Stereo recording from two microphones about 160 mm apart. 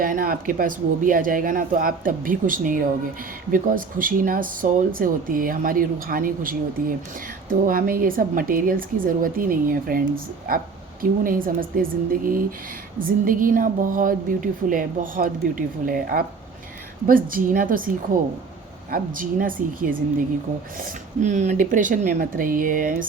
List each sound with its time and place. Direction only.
0.0 s a woman's voice: 60° right (ahead or behind)
7.7 s a woman's voice: 60° right (ahead or behind)